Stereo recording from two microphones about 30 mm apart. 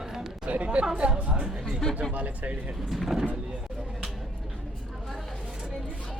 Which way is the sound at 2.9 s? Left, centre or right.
Centre.